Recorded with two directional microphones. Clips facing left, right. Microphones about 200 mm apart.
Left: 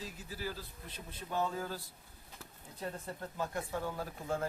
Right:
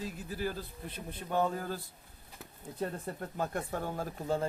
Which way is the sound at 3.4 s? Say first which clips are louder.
Right 2 dB; 55° right (ahead or behind).